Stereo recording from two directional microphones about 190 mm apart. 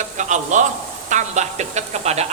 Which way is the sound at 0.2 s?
40° right (ahead or behind).